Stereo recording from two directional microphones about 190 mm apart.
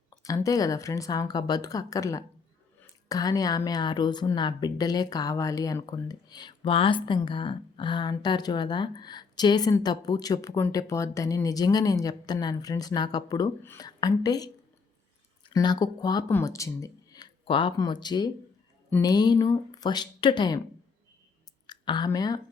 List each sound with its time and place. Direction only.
0.2 s a woman's voice: 15° left (ahead or behind)
18.9 s speech: 10° left (ahead or behind)
19.1 s a woman's voice: 20° left (ahead or behind)
21.7 s speech: 25° left (ahead or behind)